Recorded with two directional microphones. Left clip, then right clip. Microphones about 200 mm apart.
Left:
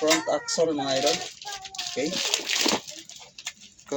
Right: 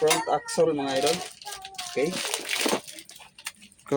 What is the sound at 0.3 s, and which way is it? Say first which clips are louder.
Speech: right 1 dB; 40° right (ahead or behind).